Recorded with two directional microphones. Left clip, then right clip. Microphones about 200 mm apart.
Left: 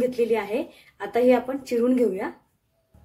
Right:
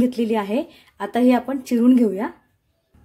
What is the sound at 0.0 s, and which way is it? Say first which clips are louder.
Speech: right 1 dB; 40° right (ahead or behind).